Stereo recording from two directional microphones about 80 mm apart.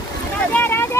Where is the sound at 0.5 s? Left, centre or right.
Left.